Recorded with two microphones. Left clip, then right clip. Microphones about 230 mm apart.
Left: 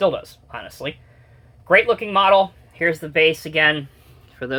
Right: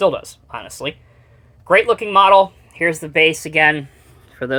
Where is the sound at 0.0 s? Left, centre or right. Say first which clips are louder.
Right 3 dB; right.